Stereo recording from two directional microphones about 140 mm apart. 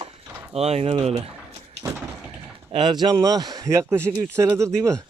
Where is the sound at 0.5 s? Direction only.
50° right (ahead or behind).